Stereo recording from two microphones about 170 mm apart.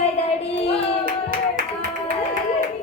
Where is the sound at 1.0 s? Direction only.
55° right (ahead or behind).